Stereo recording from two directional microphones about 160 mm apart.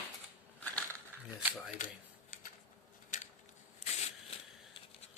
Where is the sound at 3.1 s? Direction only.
55° left (ahead or behind).